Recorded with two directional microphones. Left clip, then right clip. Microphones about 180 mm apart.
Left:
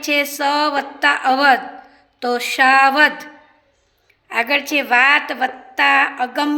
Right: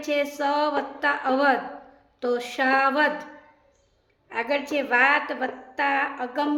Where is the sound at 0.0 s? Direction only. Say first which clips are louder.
Left 7 dB; 10° left (ahead or behind).